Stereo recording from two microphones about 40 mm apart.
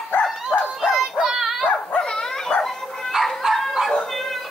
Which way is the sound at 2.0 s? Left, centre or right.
Centre.